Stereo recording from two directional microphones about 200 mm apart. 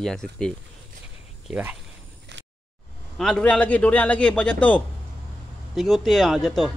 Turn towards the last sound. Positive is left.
turn(degrees=0)  # may be behind; listen again after turning